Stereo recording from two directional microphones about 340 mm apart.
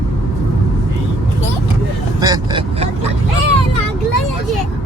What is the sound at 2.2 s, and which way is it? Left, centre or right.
Speech, centre.